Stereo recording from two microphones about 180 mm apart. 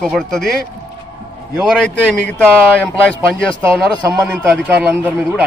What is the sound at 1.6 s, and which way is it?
Speech, centre (ahead or behind).